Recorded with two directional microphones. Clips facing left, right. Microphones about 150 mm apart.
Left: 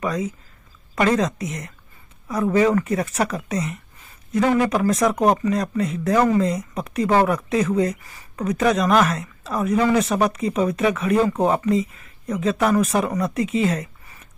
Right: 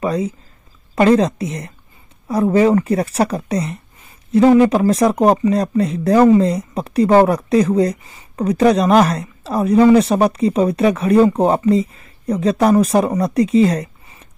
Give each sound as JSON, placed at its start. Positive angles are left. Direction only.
{"t": 0.0, "sound": "a woman's voice", "side_deg": -30}